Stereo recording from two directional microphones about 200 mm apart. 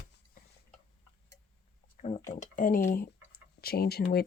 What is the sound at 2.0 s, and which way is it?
Speech, 35° left (ahead or behind).